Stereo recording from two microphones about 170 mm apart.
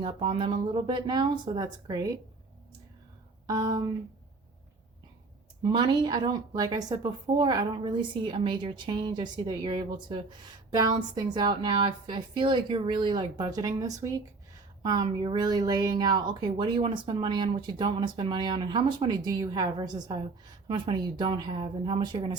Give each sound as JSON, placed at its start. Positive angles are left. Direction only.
{"t": 0.0, "sound": "a woman's voice", "side_deg": -30}
{"t": 3.4, "sound": "a woman's voice", "side_deg": -20}
{"t": 5.6, "sound": "a woman's voice", "side_deg": -25}